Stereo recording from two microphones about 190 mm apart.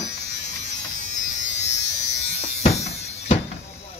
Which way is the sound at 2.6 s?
35° left (ahead or behind).